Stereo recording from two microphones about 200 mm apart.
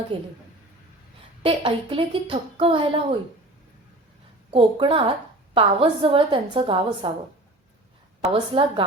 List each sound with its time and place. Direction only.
0.1 s a woman's voice: 25° right (ahead or behind)
1.4 s a woman's voice: 25° right (ahead or behind)
4.5 s a woman's voice: 25° right (ahead or behind)
8.2 s a woman's voice: 25° right (ahead or behind)